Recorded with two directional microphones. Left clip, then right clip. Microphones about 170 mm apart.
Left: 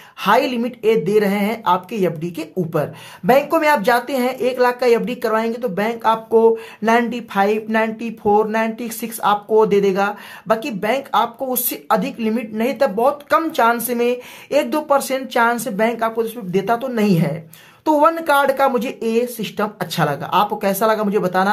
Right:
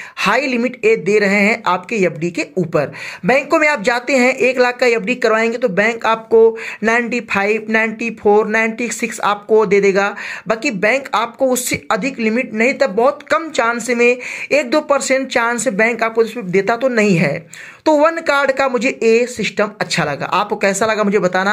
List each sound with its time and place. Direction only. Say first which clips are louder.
0.2 s speech: right 1 dB; 15° right (ahead or behind)